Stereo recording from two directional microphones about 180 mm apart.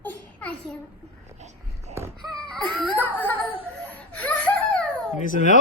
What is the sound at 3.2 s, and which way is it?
Laughter, 10° left (ahead or behind).